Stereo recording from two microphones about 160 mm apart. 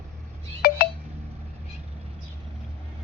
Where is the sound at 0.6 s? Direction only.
70° left (ahead or behind).